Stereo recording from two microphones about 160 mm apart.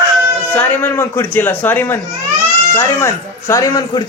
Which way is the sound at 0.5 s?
10° left (ahead or behind).